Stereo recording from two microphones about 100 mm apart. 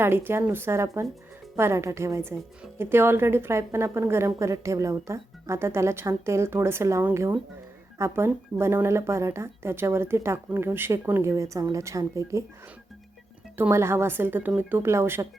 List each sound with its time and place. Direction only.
0.0 s a woman's voice: 25° right (ahead or behind)
13.6 s a woman's voice: 25° right (ahead or behind)